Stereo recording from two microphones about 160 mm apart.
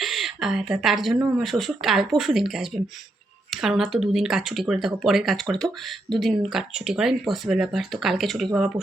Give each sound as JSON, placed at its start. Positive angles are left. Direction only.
{"t": 0.0, "sound": "speech", "side_deg": 0}